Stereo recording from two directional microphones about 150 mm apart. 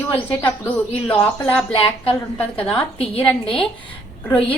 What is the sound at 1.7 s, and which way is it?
Speech, 35° left (ahead or behind).